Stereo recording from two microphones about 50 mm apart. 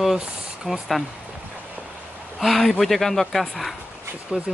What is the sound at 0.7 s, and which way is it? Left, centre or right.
Speech, centre.